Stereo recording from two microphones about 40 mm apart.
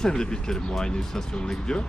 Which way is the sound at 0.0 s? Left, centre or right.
Centre.